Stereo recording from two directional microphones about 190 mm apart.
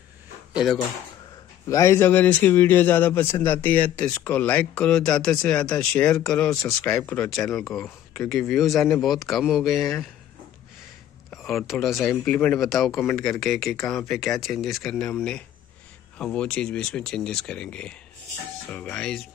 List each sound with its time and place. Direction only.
1.7 s a man's voice: 15° left (ahead or behind); by 9.9 s centre (ahead or behind)
11.2 s speech: centre (ahead or behind)